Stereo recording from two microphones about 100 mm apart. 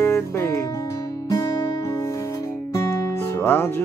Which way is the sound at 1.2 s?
35° left (ahead or behind).